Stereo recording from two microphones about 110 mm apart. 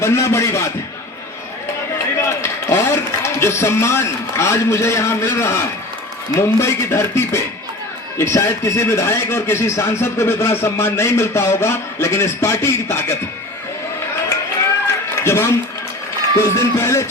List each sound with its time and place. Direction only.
0.0 s speech: 25° left (ahead or behind)
1.9 s a man's voice: 25° left (ahead or behind)
15.1 s a sound: 25° left (ahead or behind)
16.4 s speech: 25° left (ahead or behind)